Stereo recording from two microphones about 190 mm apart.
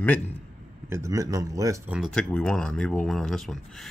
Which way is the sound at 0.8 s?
15° right (ahead or behind).